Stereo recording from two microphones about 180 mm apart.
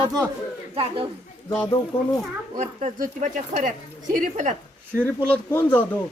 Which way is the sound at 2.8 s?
45° right (ahead or behind).